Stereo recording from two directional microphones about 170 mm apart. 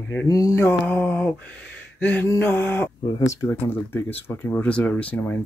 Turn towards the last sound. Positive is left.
turn(degrees=10)  # may be behind; listen again after turning